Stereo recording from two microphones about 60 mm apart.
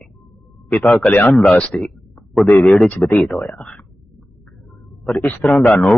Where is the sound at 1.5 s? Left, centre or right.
Centre.